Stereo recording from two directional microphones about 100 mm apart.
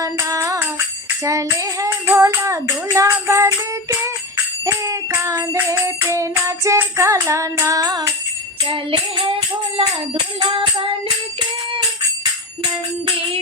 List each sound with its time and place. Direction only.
0.0 s music: 30° right (ahead or behind)
8.6 s music: 60° right (ahead or behind)
10.4 s music: 60° right (ahead or behind)